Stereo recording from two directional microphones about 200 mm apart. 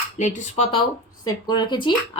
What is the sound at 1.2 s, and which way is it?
Speech, 20° left (ahead or behind).